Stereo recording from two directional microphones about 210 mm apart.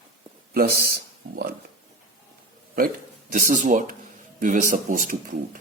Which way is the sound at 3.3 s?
40° right (ahead or behind).